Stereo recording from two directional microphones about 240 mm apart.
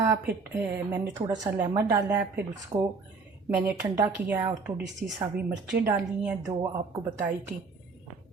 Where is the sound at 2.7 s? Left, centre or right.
Centre.